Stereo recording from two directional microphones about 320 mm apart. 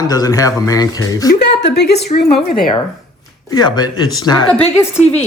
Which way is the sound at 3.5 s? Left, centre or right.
Centre.